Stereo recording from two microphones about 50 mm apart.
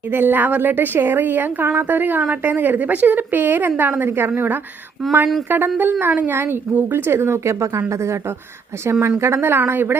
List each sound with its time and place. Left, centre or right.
0.1 s a woman's voice: right
5.5 s a woman's voice: right
8.9 s a woman's voice: right